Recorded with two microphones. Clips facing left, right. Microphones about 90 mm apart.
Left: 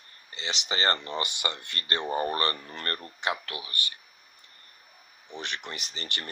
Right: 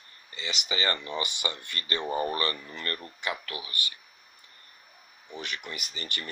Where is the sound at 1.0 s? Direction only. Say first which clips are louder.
Left 1 dB; 55° left (ahead or behind).